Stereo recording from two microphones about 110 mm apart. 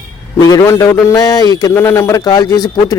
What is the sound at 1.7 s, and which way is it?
Speech, 25° left (ahead or behind).